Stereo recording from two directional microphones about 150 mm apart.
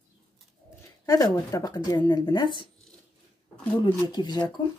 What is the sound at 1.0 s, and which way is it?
Speech, 20° left (ahead or behind).